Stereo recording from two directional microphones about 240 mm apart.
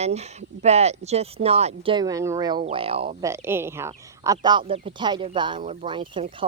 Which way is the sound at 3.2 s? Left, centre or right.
Centre.